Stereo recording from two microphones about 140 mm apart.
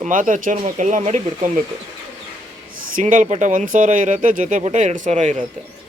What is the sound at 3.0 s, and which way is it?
Speech, 70° right (ahead or behind).